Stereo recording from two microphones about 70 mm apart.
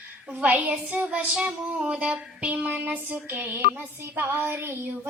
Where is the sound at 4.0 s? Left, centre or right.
Right.